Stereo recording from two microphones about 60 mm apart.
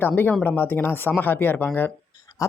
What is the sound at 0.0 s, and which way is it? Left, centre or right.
Speech, left.